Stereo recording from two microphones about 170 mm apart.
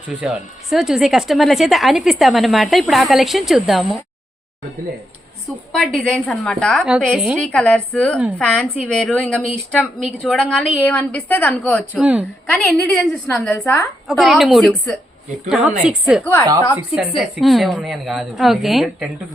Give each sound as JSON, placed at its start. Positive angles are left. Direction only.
{"t": 0.1, "sound": "speech", "side_deg": 0}
{"t": 5.5, "sound": "a woman's voice", "side_deg": 0}
{"t": 11.9, "sound": "a woman's voice", "side_deg": -5}
{"t": 12.5, "sound": "a woman's voice", "side_deg": 5}
{"t": 14.1, "sound": "speech", "side_deg": 0}